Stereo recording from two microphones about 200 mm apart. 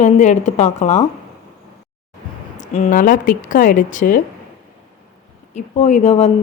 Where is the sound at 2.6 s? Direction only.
35° left (ahead or behind).